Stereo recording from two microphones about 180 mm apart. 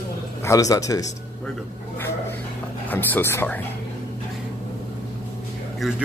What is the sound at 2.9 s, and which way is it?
Speech, 10° left (ahead or behind).